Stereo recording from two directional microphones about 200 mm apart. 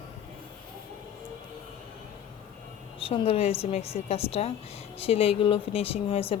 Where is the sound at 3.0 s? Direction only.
30° left (ahead or behind).